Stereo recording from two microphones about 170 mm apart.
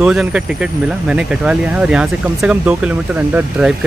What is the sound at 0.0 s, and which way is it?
Speech, 5° right (ahead or behind).